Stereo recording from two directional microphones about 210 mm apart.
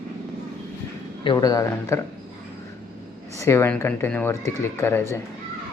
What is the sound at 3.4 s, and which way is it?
Speech, 10° left (ahead or behind).